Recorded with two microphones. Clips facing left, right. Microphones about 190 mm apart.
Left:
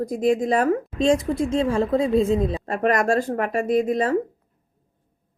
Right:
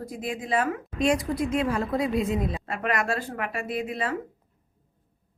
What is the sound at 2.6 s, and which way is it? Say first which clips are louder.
Speech: left 7 dB; 40° left (ahead or behind).